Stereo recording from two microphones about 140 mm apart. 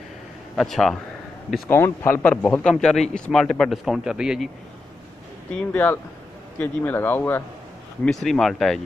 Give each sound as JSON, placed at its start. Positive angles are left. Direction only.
{"t": 0.6, "sound": "speech", "side_deg": 0}
{"t": 1.7, "sound": "speech", "side_deg": 15}
{"t": 5.7, "sound": "speech", "side_deg": 10}
{"t": 8.0, "sound": "speech", "side_deg": 5}